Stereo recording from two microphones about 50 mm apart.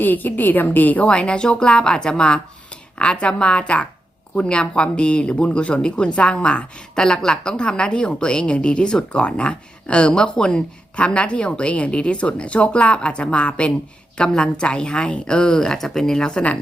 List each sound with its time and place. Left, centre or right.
0.0 s a woman's voice: left
1.0 s a woman's voice: centre